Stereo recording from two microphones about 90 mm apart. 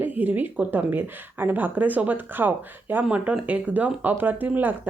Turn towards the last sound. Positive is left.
turn(degrees=-20)  # may be behind; listen again after turning